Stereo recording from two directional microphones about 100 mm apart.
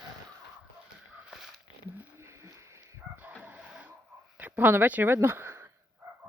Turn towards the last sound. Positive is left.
turn(degrees=-30)  # may be behind; listen again after turning